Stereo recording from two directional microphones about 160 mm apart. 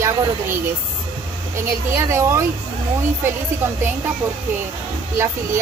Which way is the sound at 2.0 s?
15° right (ahead or behind).